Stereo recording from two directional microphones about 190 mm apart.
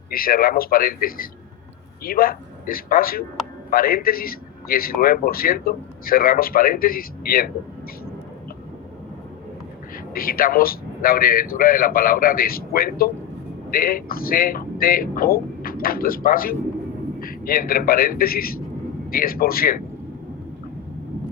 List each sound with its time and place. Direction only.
0.1 s a man's voice: 50° left (ahead or behind)
10.2 s a man's voice: 50° left (ahead or behind)